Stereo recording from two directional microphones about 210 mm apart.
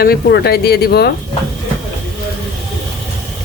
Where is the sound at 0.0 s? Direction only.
50° left (ahead or behind).